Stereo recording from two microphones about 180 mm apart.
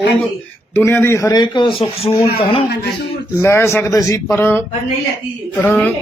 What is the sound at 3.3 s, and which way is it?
A man's voice, 15° left (ahead or behind).